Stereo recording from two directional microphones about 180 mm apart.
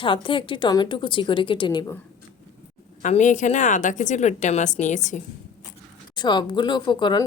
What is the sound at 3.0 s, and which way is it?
A woman's voice, 40° left (ahead or behind).